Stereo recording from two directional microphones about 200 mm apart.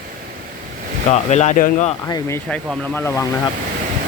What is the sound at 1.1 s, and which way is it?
Speech, 35° left (ahead or behind).